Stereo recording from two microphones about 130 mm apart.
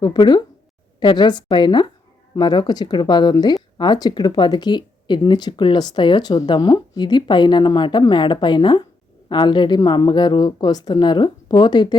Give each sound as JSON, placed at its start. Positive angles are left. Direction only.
{"t": 0.0, "sound": "speech", "side_deg": 35}